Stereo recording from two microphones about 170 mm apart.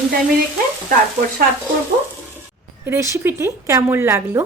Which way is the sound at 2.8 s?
15° right (ahead or behind).